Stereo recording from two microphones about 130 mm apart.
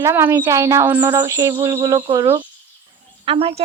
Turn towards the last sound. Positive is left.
turn(degrees=-45)  # may be behind; listen again after turning